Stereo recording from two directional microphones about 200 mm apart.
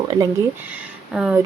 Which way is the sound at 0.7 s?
5° right (ahead or behind).